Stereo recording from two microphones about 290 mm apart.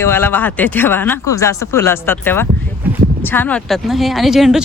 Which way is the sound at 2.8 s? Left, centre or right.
Centre.